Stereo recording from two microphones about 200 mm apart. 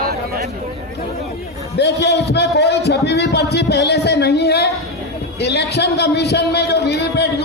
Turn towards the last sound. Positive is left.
turn(degrees=60)  # may be behind; listen again after turning